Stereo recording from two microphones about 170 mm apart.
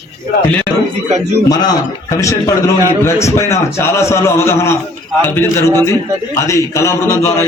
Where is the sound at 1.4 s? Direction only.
20° left (ahead or behind).